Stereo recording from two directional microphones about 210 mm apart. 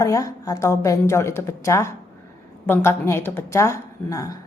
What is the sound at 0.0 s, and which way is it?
A woman's voice, 15° left (ahead or behind).